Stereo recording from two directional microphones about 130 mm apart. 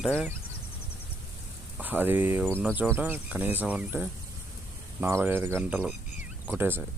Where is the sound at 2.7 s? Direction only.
15° right (ahead or behind).